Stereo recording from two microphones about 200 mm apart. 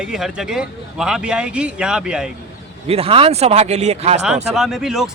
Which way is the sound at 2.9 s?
30° right (ahead or behind).